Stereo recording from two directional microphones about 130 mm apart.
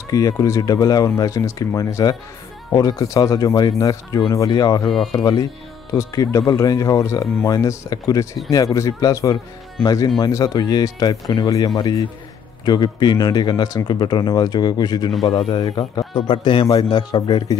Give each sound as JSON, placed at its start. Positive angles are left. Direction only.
{"t": 0.1, "sound": "speech", "side_deg": 30}